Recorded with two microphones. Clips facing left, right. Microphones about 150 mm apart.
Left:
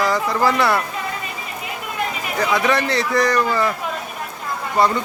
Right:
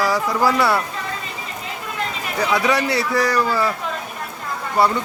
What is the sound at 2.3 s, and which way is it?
Speech, 10° right (ahead or behind).